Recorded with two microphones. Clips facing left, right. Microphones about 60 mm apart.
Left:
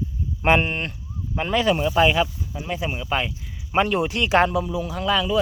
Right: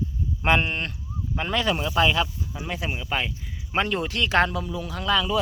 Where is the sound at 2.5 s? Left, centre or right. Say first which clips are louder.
Left 3 dB; centre.